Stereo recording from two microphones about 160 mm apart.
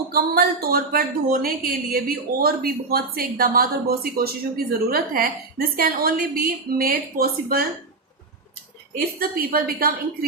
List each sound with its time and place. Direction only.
0.1 s a woman's voice: 70° right (ahead or behind)
9.1 s a woman's voice: 65° right (ahead or behind)